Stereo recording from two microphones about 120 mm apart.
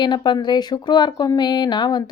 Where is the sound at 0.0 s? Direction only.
40° left (ahead or behind).